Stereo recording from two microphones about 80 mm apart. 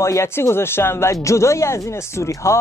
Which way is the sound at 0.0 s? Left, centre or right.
Left.